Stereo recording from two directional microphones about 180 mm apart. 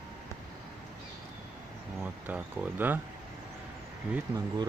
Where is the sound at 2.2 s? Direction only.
10° right (ahead or behind).